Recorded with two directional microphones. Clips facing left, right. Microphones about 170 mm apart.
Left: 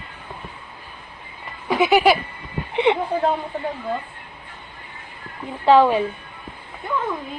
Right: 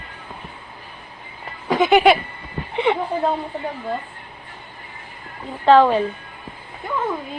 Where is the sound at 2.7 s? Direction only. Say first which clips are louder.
Left 1 dB; 20° left (ahead or behind).